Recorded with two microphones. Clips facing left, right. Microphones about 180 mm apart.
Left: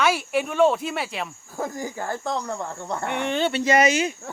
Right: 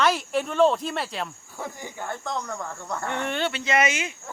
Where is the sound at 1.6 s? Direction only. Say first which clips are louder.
Left 6 dB; 40° left (ahead or behind); by 3.3 s 15° left (ahead or behind).